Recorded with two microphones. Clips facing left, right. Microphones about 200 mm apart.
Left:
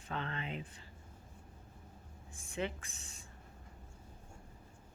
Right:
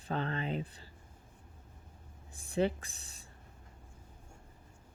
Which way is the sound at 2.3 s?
35° right (ahead or behind).